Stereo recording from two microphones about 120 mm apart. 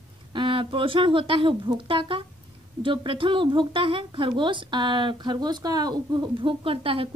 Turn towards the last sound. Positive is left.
turn(degrees=-50)  # may be behind; listen again after turning